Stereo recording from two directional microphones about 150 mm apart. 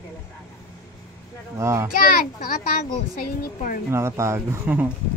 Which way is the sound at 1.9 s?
70° left (ahead or behind).